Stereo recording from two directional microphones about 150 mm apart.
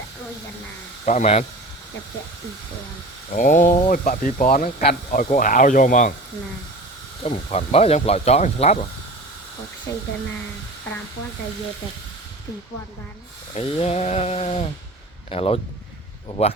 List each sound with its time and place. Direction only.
1.0 s speech: 50° left (ahead or behind)
3.3 s speech: 60° left (ahead or behind)
7.3 s speech: 45° left (ahead or behind)
9.9 s speech: 20° left (ahead or behind)
13.5 s speech: 40° left (ahead or behind)